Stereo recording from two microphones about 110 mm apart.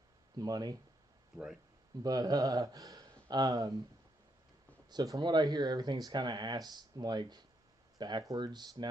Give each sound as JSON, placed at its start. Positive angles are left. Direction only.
{"t": 0.4, "sound": "speech", "side_deg": -35}
{"t": 1.3, "sound": "speech", "side_deg": -5}
{"t": 2.0, "sound": "speech", "side_deg": -35}
{"t": 4.8, "sound": "speech", "side_deg": -35}